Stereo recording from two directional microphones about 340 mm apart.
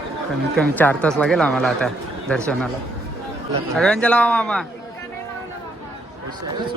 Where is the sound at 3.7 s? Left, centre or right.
Centre.